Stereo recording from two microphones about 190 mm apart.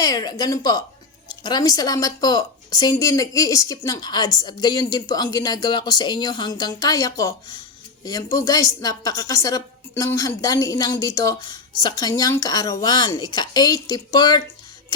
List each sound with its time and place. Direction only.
0.0 s a woman's voice: 20° left (ahead or behind)